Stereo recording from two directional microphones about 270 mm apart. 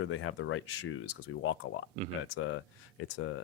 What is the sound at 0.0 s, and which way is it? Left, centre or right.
Speech, left.